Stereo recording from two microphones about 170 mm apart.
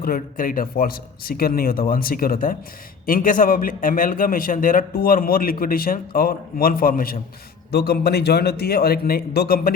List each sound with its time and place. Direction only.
0.0 s a man's voice: 55° left (ahead or behind)
7.7 s a man's voice: 70° left (ahead or behind)